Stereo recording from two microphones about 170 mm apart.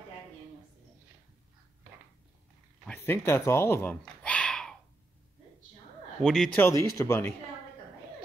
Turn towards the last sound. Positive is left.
turn(degrees=15)  # may be behind; listen again after turning